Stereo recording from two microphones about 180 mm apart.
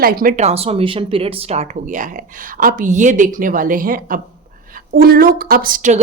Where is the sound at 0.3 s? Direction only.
35° right (ahead or behind).